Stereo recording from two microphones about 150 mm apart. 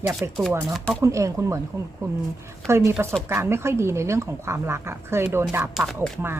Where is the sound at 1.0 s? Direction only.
20° right (ahead or behind).